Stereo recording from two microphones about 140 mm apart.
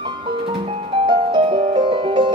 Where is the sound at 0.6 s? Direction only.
35° right (ahead or behind).